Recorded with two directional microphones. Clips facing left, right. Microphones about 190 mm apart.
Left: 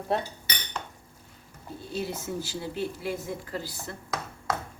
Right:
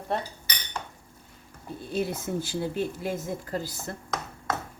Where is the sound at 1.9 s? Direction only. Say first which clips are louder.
Right 3 dB; 55° right (ahead or behind).